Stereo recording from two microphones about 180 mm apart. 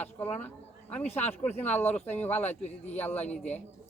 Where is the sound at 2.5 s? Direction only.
40° left (ahead or behind).